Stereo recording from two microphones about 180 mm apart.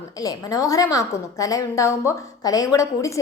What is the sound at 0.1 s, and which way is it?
A woman's voice, 20° left (ahead or behind).